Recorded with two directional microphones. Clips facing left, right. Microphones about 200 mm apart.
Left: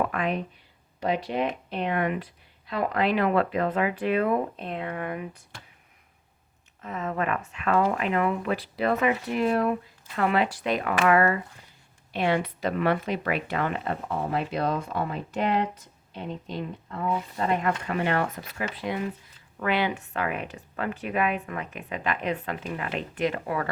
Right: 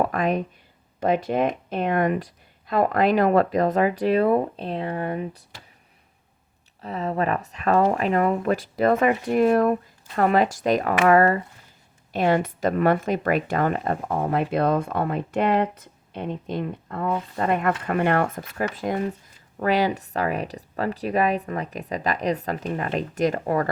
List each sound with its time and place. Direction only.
0.0 s speech: 40° right (ahead or behind)
6.8 s speech: 35° right (ahead or behind)